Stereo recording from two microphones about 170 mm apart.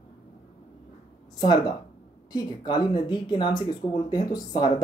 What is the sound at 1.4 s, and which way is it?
Speech, 25° left (ahead or behind).